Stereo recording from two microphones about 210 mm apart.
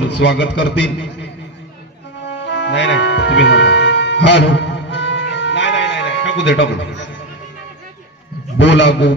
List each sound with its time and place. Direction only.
0.2 s a man's voice: 55° left (ahead or behind)
2.2 s music: 55° left (ahead or behind)
8.5 s a man's voice: 60° left (ahead or behind)